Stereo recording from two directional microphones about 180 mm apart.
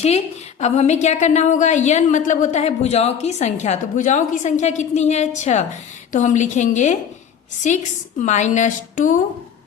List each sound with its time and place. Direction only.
0.6 s a woman's voice: 40° left (ahead or behind)
8.2 s a woman's voice: 40° left (ahead or behind)